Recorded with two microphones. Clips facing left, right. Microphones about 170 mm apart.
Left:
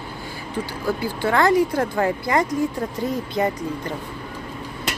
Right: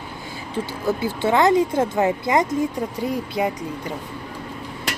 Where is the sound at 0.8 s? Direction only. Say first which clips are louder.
Right 2 dB; 20° right (ahead or behind).